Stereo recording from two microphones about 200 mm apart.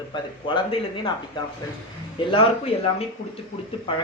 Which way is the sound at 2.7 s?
25° left (ahead or behind).